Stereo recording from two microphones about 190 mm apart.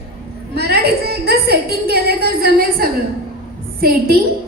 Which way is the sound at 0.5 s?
55° right (ahead or behind).